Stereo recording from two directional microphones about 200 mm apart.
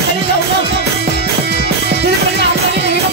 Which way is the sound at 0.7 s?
55° right (ahead or behind).